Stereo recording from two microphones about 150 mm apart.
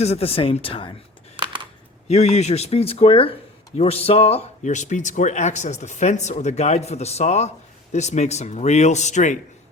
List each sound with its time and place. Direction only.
0.0 s speech: 45° left (ahead or behind)
1.4 s a sound: 35° right (ahead or behind)
2.0 s speech: 45° left (ahead or behind)